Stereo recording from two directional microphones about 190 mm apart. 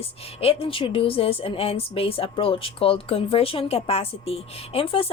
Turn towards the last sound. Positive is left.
turn(degrees=30)  # may be behind; listen again after turning